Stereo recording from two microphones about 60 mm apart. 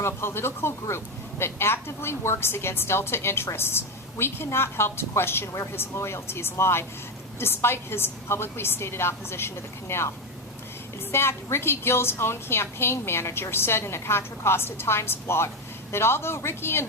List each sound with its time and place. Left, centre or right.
0.0 s speech: left
11.1 s speech: left